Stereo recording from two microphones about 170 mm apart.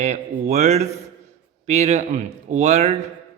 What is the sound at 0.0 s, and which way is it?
A man's voice, 45° right (ahead or behind).